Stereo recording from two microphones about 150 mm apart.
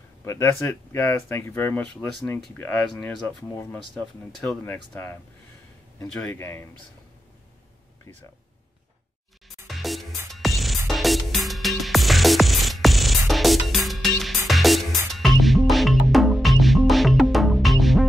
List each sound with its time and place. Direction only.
0.2 s speech: 20° left (ahead or behind)
6.3 s speech: 15° left (ahead or behind)
9.7 s music: centre (ahead or behind)